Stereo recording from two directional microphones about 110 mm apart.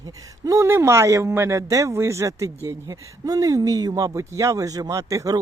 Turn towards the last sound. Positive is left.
turn(degrees=-30)  # may be behind; listen again after turning